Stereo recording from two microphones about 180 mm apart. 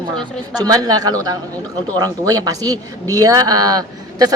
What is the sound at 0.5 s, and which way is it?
A man's voice, 20° right (ahead or behind).